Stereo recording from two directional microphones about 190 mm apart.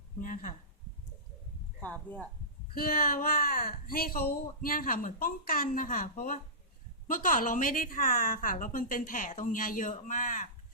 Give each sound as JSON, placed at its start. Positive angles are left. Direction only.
{"t": 0.2, "sound": "speech", "side_deg": 45}
{"t": 1.8, "sound": "speech", "side_deg": 10}
{"t": 2.7, "sound": "speech", "side_deg": 50}